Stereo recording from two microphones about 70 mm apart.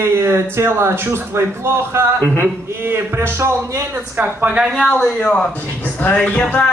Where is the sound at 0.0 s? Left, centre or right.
Right.